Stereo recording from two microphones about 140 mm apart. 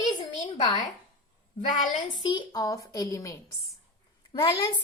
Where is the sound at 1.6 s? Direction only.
65° left (ahead or behind).